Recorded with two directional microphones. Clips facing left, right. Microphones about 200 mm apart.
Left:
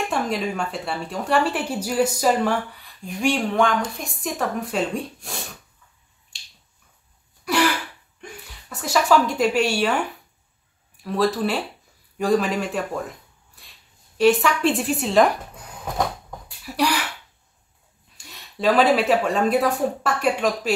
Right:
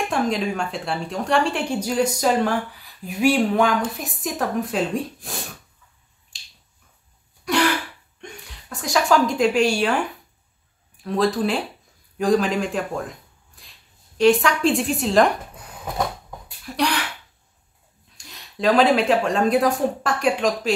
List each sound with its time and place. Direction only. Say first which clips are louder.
0.1 s speech: right 2 dB; centre (ahead or behind)
6.3 s finger snapping: even; centre (ahead or behind)
8.2 s a sound: even; centre (ahead or behind)
11.3 s speech: right 1 dB; centre (ahead or behind)
14.1 s speech: right 1 dB; centre (ahead or behind)
16.6 s a sound: left 1 dB; 5° left (ahead or behind)
18.1 s speech: right 1 dB; centre (ahead or behind)